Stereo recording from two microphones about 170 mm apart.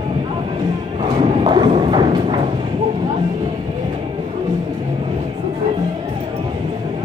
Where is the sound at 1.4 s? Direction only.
30° right (ahead or behind).